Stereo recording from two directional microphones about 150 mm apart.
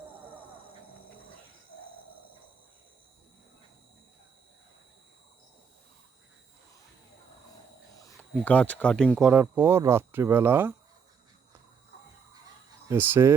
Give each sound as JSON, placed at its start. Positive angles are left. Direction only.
{"t": 8.1, "sound": "speech", "side_deg": 10}
{"t": 9.2, "sound": "speech", "side_deg": -15}
{"t": 12.9, "sound": "speech", "side_deg": -15}